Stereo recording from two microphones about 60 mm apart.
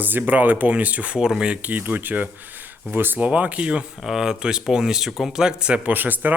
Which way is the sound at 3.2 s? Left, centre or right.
Right.